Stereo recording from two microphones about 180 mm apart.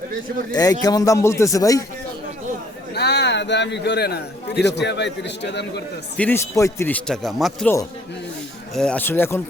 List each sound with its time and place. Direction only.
0.5 s speech: 20° left (ahead or behind)
2.9 s a man's voice: 65° left (ahead or behind)
6.1 s speech: 10° left (ahead or behind)
8.7 s speech: 5° left (ahead or behind)